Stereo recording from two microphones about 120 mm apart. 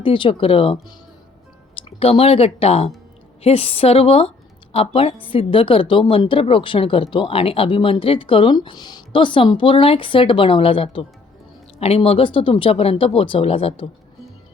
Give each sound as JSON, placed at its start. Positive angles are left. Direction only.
{"t": 0.0, "sound": "a woman's voice", "side_deg": 45}
{"t": 2.0, "sound": "a woman's voice", "side_deg": 55}